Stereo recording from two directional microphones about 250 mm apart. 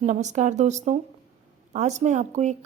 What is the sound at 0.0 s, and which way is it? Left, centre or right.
A woman's voice, right.